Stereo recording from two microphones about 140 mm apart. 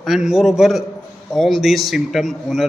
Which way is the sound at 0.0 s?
5° right (ahead or behind).